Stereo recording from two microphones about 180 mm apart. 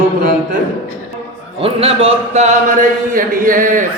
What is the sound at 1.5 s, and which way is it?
A man's voice, 30° right (ahead or behind).